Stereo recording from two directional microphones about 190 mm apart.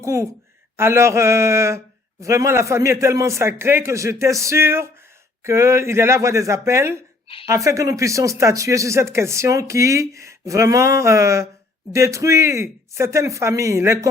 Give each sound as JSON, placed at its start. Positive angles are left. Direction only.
{"t": 0.0, "sound": "speech", "side_deg": -15}